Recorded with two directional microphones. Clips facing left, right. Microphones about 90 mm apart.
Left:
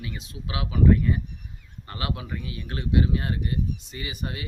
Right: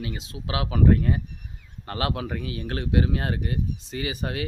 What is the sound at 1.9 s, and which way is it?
Speech, 70° right (ahead or behind).